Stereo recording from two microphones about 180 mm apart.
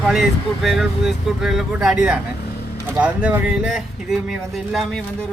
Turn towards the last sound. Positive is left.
turn(degrees=0)  # may be behind; listen again after turning